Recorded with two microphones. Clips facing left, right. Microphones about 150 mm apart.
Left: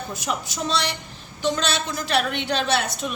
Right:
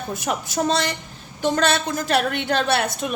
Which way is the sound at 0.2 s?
55° right (ahead or behind).